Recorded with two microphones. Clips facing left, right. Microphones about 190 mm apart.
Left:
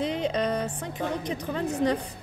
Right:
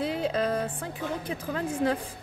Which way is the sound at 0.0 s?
5° right (ahead or behind).